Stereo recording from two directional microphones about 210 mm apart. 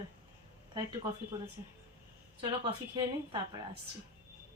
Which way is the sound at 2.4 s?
25° right (ahead or behind).